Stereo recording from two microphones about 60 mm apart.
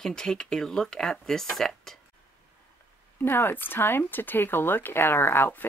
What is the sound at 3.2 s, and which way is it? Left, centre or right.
Speech, left.